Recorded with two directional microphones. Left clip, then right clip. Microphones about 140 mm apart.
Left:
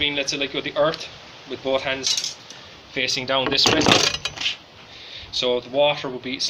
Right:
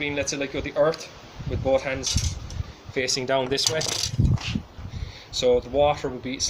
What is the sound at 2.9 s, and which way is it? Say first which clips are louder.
Speech: left 2 dB; 40° right (ahead or behind).